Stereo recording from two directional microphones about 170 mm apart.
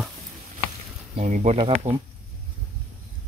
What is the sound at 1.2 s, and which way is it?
Speech, 45° right (ahead or behind).